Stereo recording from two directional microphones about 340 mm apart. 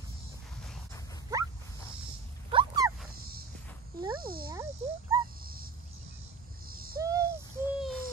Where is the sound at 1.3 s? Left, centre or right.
Centre.